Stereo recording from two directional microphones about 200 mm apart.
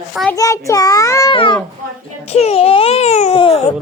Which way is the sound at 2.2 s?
30° left (ahead or behind).